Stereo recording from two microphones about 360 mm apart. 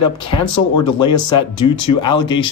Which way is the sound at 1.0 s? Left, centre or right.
Centre.